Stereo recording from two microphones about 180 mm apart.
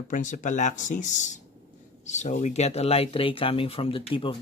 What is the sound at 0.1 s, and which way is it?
Speech, 45° left (ahead or behind).